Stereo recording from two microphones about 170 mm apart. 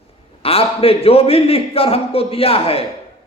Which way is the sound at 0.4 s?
35° left (ahead or behind).